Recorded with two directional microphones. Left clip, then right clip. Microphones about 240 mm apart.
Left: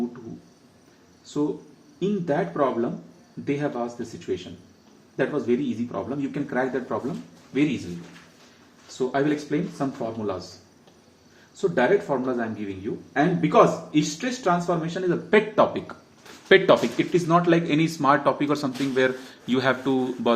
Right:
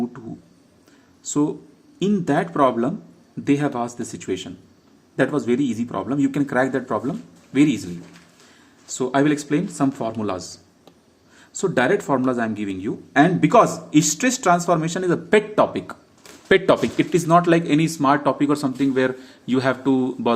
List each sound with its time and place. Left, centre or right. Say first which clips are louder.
2.0 s speech: right 4 dB; right
9.0 s speech: right 4 dB; right
11.6 s speech: right 2 dB; right